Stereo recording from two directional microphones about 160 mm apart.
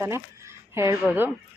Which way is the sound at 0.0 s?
15° right (ahead or behind).